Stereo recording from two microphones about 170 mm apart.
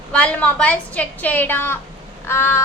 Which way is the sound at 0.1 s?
5° left (ahead or behind).